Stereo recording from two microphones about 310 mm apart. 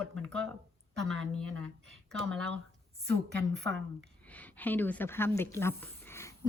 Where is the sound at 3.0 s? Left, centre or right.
Right.